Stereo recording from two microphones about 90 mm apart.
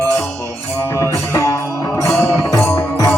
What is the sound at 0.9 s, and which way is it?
Music, 35° left (ahead or behind).